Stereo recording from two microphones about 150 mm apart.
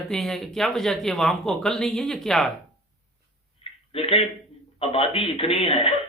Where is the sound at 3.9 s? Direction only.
40° left (ahead or behind).